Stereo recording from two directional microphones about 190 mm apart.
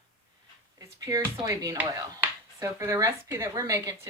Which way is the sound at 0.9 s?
15° right (ahead or behind).